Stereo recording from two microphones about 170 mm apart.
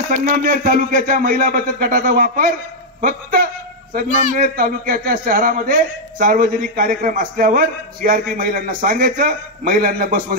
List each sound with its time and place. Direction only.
0.1 s a man's voice: 55° right (ahead or behind)